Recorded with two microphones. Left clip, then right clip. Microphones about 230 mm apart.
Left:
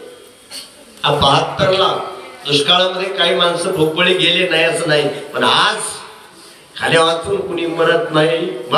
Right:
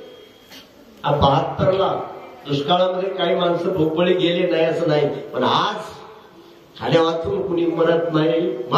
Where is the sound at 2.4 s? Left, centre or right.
Left.